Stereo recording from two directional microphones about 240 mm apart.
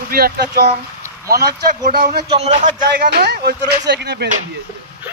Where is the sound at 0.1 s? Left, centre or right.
Right.